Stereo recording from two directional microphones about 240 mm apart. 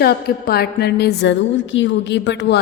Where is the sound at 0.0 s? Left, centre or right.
Left.